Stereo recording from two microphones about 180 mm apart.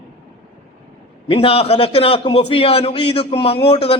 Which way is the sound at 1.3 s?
30° left (ahead or behind).